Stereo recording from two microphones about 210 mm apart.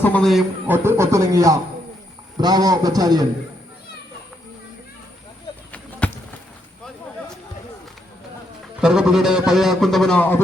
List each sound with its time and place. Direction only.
0.0 s a man's voice: 5° left (ahead or behind)
0.9 s a man's voice: 15° right (ahead or behind)
6.0 s run: 5° left (ahead or behind)
8.8 s a man's voice: 5° right (ahead or behind)